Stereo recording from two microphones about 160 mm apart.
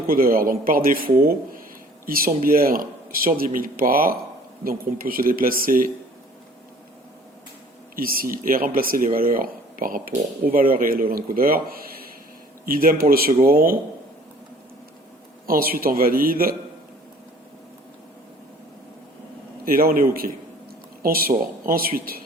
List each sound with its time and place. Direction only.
0.1 s speech: 65° right (ahead or behind)
2.0 s speech: 65° right (ahead or behind)
7.9 s speech: 65° right (ahead or behind)
15.4 s speech: 65° right (ahead or behind)
19.6 s speech: 65° right (ahead or behind)